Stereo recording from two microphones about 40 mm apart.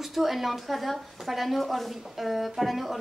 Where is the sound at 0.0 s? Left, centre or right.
Centre.